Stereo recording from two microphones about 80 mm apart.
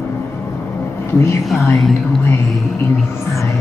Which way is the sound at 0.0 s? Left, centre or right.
Left.